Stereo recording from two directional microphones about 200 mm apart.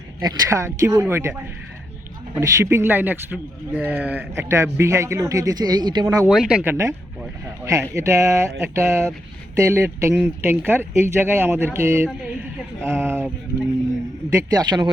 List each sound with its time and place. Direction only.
0.2 s speech: 20° right (ahead or behind)
6.2 s speech: 5° right (ahead or behind)
14.3 s a man's voice: 20° right (ahead or behind)